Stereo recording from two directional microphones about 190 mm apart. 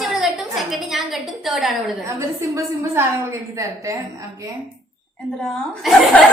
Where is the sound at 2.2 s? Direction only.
15° right (ahead or behind).